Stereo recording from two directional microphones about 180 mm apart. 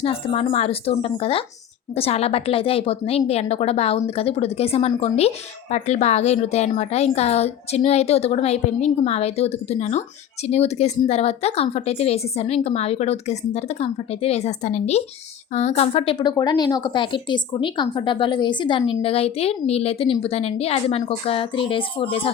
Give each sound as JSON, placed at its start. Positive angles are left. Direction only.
{"t": 0.0, "sound": "a woman's voice", "side_deg": 35}